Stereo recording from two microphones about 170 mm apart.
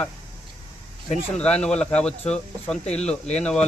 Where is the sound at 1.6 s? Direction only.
5° left (ahead or behind).